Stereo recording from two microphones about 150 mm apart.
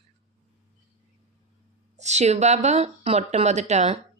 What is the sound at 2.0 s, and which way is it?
Speech, 50° right (ahead or behind).